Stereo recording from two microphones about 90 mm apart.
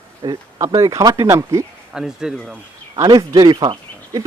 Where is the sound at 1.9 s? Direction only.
5° right (ahead or behind).